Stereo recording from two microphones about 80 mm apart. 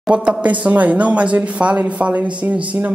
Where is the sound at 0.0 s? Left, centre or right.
Centre.